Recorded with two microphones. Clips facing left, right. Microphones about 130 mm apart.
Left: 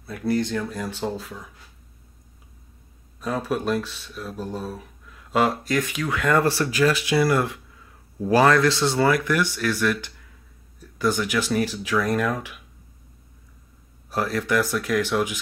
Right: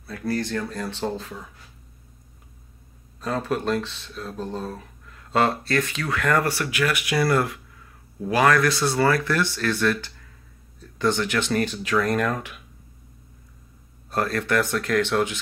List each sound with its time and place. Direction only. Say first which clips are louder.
0.0 s speech: left 3 dB; 20° left (ahead or behind)
3.2 s speech: even; 10° left (ahead or behind)
14.1 s speech: even; 10° left (ahead or behind)